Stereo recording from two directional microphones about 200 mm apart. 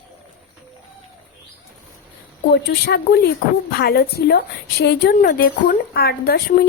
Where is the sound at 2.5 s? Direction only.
55° left (ahead or behind).